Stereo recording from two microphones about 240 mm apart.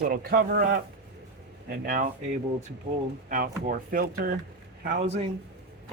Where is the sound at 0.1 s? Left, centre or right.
Right.